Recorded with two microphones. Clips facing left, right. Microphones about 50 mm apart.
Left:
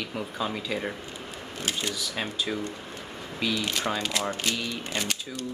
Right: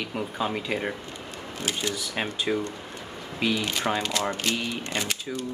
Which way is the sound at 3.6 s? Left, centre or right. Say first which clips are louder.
Right 2 dB; centre.